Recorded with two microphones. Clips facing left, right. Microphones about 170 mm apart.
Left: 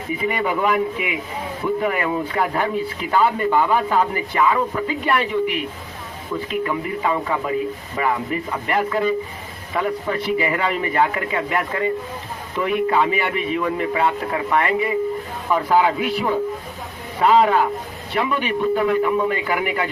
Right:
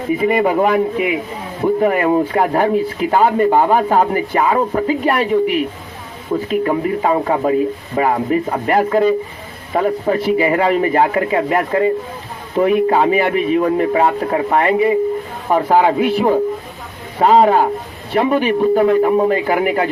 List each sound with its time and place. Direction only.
0.2 s speech: 40° right (ahead or behind)